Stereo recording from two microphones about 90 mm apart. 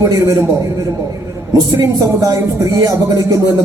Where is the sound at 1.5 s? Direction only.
40° right (ahead or behind).